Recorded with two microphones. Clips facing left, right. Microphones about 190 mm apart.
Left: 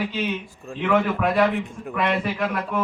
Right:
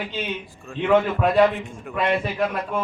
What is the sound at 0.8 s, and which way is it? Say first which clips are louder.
A man's voice: right 2 dB; 25° right (ahead or behind).